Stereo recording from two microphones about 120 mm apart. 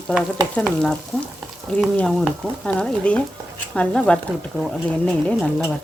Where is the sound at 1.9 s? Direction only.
5° left (ahead or behind).